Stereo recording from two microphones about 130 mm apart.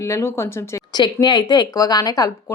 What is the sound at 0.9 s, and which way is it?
A woman's voice, 35° left (ahead or behind).